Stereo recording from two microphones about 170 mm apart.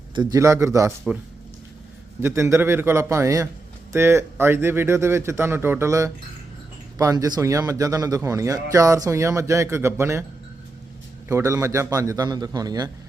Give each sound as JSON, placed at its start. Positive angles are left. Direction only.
{"t": 0.1, "sound": "speech", "side_deg": -25}
{"t": 2.2, "sound": "speech", "side_deg": -15}
{"t": 11.3, "sound": "speech", "side_deg": -15}